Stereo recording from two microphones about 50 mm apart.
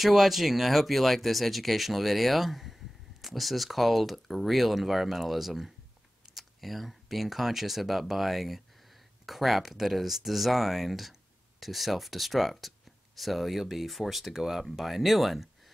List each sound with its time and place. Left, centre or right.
0.0 s speech: centre